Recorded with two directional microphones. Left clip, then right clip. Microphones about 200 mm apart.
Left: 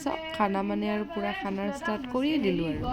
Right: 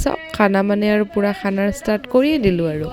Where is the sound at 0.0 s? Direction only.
50° right (ahead or behind).